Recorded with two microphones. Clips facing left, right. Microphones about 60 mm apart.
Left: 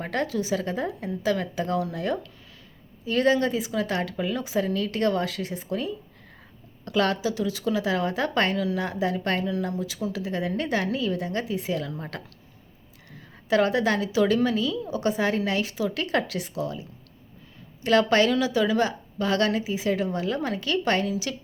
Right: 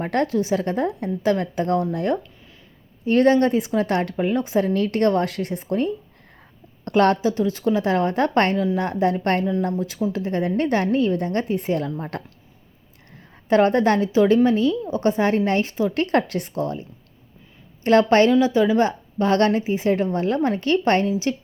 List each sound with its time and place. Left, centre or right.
0.0 s speech: right
8.5 s a woman's voice: right
8.8 s a woman's voice: right
13.5 s a woman's voice: right
17.8 s a woman's voice: right